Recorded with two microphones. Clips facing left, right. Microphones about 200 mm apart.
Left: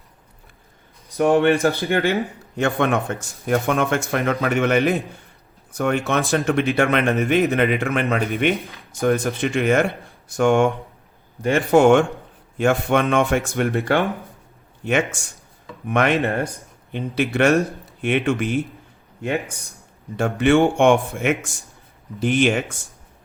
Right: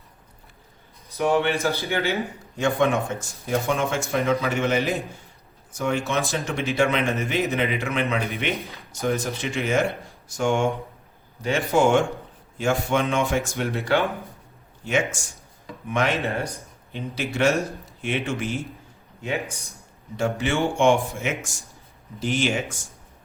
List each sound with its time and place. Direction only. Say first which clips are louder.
1.1 s a man's voice: left 6 dB; 50° left (ahead or behind)
19.5 s speech: even; 15° left (ahead or behind)
20.1 s a man's voice: left 8 dB; 60° left (ahead or behind)